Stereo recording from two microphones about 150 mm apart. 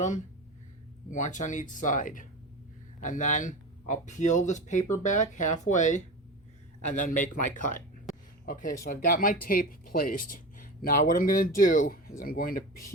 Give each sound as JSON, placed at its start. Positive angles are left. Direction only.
{"t": 1.1, "sound": "speech", "side_deg": 55}